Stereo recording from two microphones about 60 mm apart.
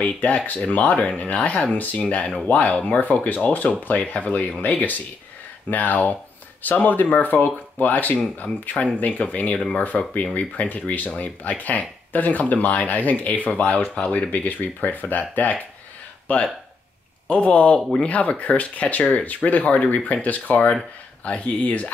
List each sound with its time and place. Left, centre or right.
0.0 s speech: left